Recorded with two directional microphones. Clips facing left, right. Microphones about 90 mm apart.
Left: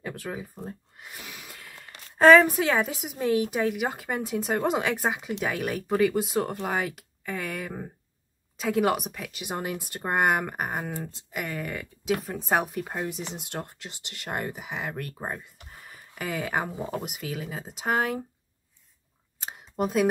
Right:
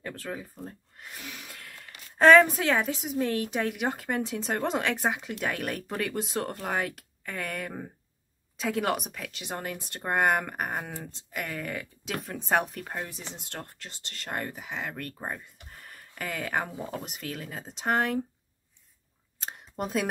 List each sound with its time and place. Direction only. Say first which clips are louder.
0.0 s speech: left 2 dB; 10° left (ahead or behind)
0.7 s a sound: left 3 dB; 5° left (ahead or behind)
2.1 s speech: left 2 dB; 5° left (ahead or behind)
16.7 s speech: left 3 dB; 20° left (ahead or behind)
17.0 s speech: left 3 dB; 10° left (ahead or behind)
19.4 s a sound: left 5 dB; 5° left (ahead or behind)